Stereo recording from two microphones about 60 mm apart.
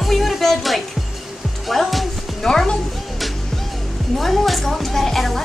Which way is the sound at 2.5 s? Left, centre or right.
Centre.